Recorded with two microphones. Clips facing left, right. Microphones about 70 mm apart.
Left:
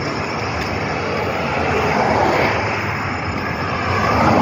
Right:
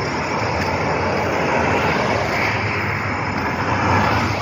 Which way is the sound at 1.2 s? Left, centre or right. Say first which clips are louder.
Right 1 dB; centre.